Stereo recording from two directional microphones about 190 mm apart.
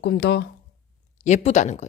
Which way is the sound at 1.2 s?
35° left (ahead or behind).